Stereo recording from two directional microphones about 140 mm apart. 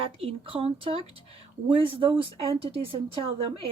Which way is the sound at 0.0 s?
45° right (ahead or behind).